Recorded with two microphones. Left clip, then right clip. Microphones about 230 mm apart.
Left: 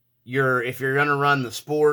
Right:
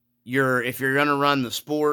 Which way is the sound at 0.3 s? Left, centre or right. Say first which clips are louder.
Even; right.